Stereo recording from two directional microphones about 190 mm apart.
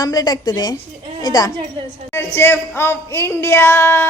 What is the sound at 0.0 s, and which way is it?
A woman's voice, 20° left (ahead or behind).